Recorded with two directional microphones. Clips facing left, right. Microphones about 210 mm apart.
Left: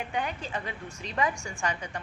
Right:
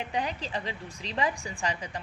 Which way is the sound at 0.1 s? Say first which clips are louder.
Right 1 dB; 35° right (ahead or behind).